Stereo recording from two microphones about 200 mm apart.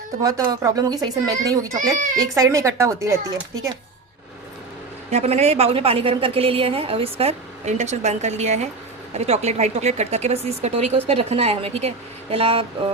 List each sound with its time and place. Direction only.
0.2 s speech: 15° right (ahead or behind)
5.1 s a woman's voice: 30° right (ahead or behind)